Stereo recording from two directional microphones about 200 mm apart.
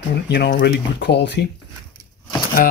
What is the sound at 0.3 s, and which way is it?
Speech, 50° left (ahead or behind).